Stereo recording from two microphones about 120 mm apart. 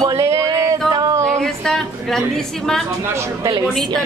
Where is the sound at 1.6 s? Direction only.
5° left (ahead or behind).